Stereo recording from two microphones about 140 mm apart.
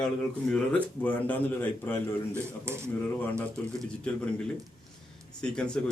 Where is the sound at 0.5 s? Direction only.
10° left (ahead or behind).